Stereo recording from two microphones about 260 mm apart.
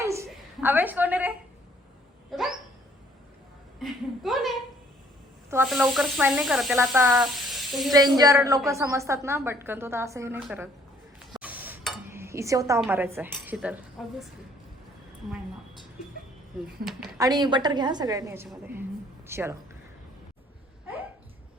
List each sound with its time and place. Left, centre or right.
0.0 s a sound: centre
2.3 s speech: centre
3.8 s speech: centre
6.9 s a woman's voice: centre
7.3 s speech: centre
7.9 s a woman's voice: centre
11.3 s stir: centre
12.1 s cutlery: centre
12.8 s a woman's voice: centre
17.2 s a woman's voice: centre